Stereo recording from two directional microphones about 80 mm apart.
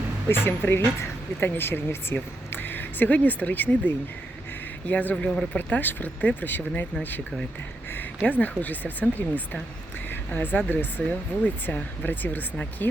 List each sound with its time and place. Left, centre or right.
0.3 s speech: left
8.3 s speech: left
10.1 s a sound: left
10.7 s speech: left